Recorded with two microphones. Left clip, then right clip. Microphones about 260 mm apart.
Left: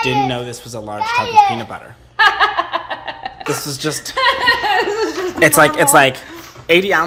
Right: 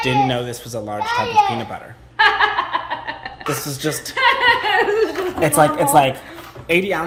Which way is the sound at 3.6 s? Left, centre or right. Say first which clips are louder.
Left 2 dB; centre.